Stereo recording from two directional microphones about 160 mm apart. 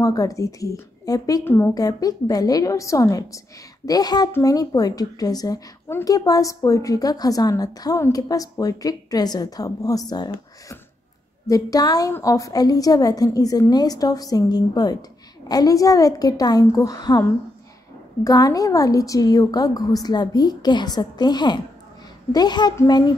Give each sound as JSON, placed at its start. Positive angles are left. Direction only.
{"t": 0.0, "sound": "a woman's voice", "side_deg": 20}